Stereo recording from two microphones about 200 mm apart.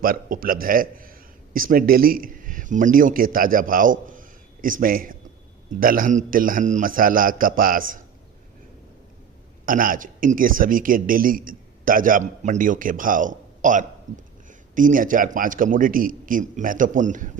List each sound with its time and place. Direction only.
0.0 s a man's voice: 45° right (ahead or behind)
9.6 s a man's voice: 45° right (ahead or behind)